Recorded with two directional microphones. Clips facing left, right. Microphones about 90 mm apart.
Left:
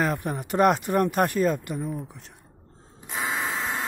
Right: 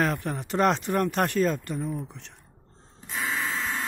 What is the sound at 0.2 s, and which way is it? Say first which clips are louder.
Speech: left 3 dB; 15° left (ahead or behind).